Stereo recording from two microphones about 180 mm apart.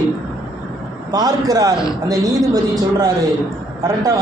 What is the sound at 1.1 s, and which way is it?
A man's voice, 20° right (ahead or behind).